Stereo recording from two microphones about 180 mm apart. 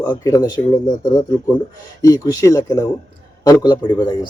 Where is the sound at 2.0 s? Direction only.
20° left (ahead or behind).